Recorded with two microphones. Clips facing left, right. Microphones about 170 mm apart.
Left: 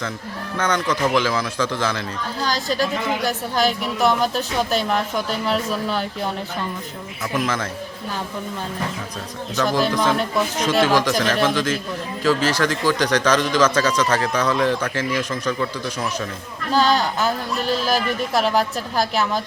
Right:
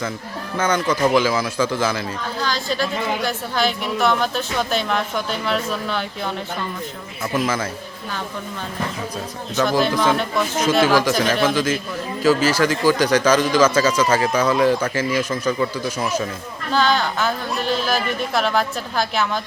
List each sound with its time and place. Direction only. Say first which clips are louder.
0.5 s speech: right 2 dB; 5° right (ahead or behind)
2.5 s speech: left 2 dB; 40° left (ahead or behind)
7.3 s speech: right 2 dB; 5° right (ahead or behind)
9.6 s speech: right 1 dB; centre (ahead or behind)
16.8 s speech: even; 40° left (ahead or behind)